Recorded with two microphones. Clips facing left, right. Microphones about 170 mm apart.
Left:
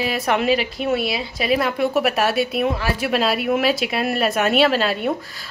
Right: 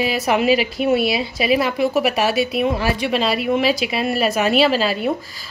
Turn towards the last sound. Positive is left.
turn(degrees=0)  # may be behind; listen again after turning